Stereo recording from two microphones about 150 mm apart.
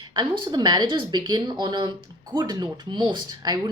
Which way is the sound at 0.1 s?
30° right (ahead or behind).